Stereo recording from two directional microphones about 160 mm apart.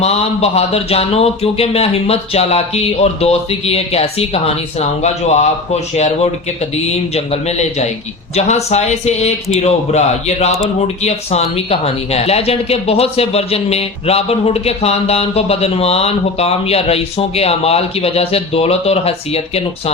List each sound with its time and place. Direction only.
0.0 s a man's voice: 40° left (ahead or behind)